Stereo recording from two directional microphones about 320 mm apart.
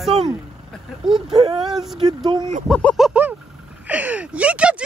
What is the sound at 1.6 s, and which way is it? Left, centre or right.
Speech, centre.